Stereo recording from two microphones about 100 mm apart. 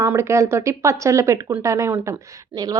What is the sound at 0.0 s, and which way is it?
Speech, 30° right (ahead or behind).